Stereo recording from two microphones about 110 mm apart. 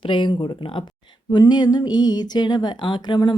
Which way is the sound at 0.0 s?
50° left (ahead or behind).